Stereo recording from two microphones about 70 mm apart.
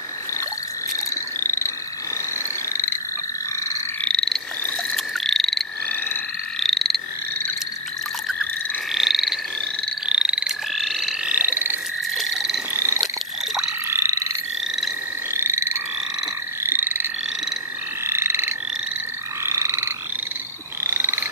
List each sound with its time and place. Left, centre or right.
1.4 s frog: left
4.0 s frog: centre
6.6 s frog: centre
8.9 s frog: centre
10.7 s frog: centre
11.2 s frog: right
12.2 s frog: centre
12.7 s frog: right
15.3 s croak: right
20.8 s frog: right